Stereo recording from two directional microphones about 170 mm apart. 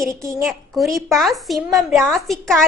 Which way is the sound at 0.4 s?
Centre (ahead or behind).